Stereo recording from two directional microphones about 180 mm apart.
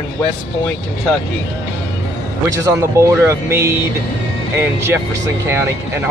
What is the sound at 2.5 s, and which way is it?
Speech, 15° right (ahead or behind).